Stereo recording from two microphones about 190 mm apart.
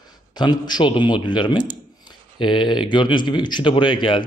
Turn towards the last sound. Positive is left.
turn(degrees=25)  # may be behind; listen again after turning